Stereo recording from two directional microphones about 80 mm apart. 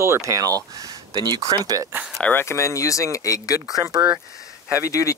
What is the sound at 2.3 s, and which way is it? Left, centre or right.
Speech, left.